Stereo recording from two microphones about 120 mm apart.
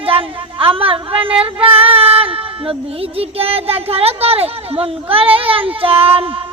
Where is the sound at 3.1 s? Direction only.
55° right (ahead or behind).